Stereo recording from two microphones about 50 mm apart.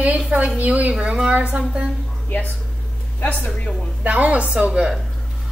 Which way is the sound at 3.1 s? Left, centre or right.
Left.